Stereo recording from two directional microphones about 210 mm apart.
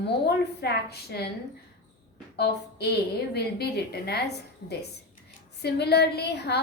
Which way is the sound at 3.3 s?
50° left (ahead or behind).